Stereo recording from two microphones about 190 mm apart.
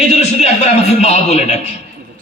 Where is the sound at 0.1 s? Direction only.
35° left (ahead or behind).